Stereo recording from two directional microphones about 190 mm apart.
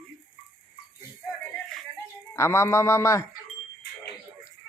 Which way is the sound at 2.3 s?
15° left (ahead or behind).